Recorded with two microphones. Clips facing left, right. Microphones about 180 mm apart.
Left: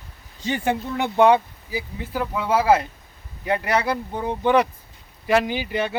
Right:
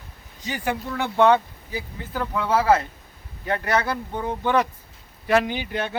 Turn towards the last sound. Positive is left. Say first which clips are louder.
# left 3 dB
turn(degrees=5)  # may be behind; listen again after turning